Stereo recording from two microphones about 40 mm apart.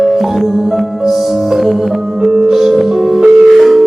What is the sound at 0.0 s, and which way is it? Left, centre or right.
Music, centre.